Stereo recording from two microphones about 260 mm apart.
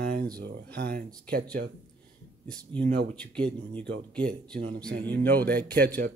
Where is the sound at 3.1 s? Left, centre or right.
Centre.